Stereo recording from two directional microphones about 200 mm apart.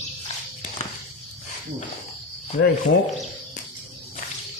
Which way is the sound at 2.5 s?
50° left (ahead or behind).